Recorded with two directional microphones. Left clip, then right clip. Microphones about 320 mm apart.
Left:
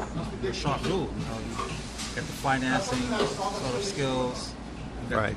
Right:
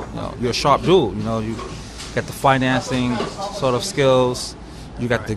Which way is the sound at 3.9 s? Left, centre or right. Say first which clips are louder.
Right 16 dB; right.